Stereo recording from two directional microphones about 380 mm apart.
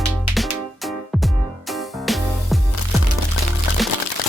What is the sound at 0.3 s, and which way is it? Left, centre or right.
Music, centre.